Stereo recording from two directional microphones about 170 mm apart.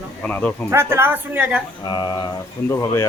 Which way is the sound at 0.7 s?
15° right (ahead or behind).